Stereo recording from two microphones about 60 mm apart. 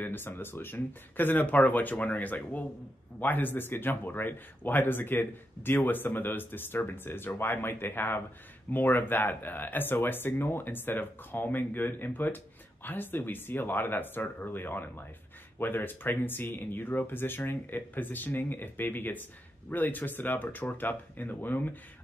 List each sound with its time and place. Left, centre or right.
0.0 s speech: left